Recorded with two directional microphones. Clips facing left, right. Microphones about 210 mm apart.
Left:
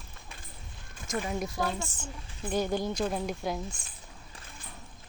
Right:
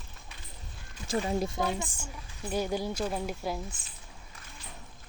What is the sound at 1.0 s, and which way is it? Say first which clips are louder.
Speech: right 3 dB; 30° right (ahead or behind).